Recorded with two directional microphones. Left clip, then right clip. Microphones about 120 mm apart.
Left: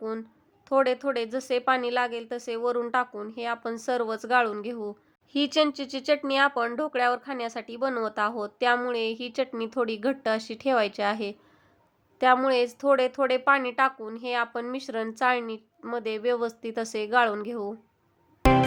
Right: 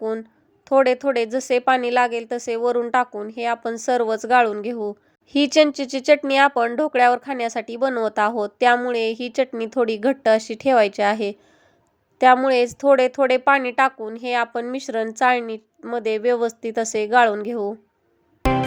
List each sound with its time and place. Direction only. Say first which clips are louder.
0.0 s a woman's voice: right 8 dB; 35° right (ahead or behind)
12.5 s speech: right 6 dB; 40° right (ahead or behind)
18.4 s music: even; centre (ahead or behind)